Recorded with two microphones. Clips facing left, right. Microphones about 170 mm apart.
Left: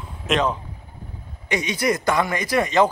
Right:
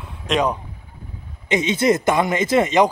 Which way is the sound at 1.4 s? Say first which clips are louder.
Right 5 dB; 25° right (ahead or behind).